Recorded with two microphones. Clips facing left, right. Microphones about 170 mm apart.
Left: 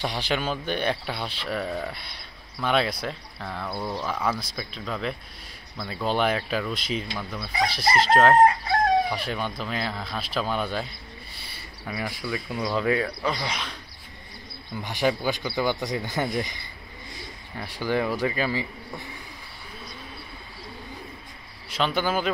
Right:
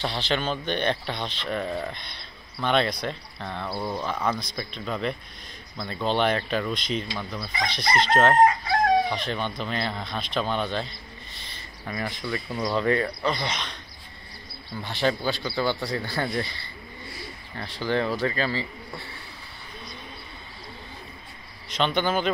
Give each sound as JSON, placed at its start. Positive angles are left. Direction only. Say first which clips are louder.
{"t": 0.0, "sound": "speech", "louder": "even", "side_deg": 10}
{"t": 3.6, "sound": "speech", "louder": "right 1 dB", "side_deg": -10}
{"t": 3.9, "sound": "speech", "louder": "even", "side_deg": 5}
{"t": 14.8, "sound": "speech", "louder": "left 1 dB", "side_deg": 15}
{"t": 21.6, "sound": "speech", "louder": "right 1 dB", "side_deg": 5}